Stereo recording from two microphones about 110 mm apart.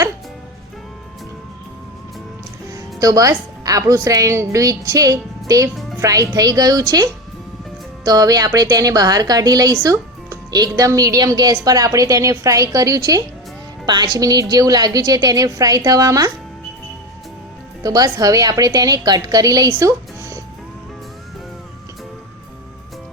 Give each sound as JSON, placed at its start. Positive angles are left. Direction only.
{"t": 2.7, "sound": "a woman's voice", "side_deg": -30}
{"t": 17.8, "sound": "a woman's voice", "side_deg": -35}